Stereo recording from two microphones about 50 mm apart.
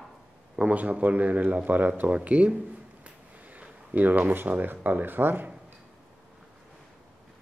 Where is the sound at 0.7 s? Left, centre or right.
Right.